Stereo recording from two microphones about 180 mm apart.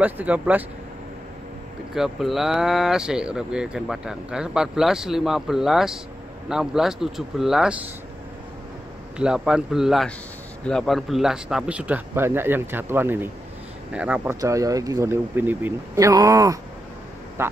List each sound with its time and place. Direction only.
0.0 s speech: 10° right (ahead or behind)
2.0 s speech: centre (ahead or behind)
9.2 s speech: 5° right (ahead or behind)